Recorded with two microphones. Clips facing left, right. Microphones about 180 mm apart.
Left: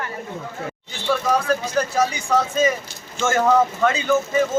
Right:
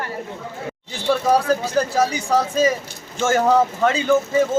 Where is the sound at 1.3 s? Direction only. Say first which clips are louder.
Right 3 dB; 35° right (ahead or behind).